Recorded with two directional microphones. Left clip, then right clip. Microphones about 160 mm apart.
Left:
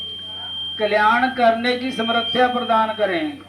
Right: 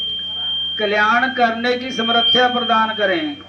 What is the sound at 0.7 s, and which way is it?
Speech, 35° right (ahead or behind).